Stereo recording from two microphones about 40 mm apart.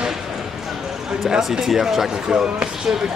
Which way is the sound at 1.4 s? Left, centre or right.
Centre.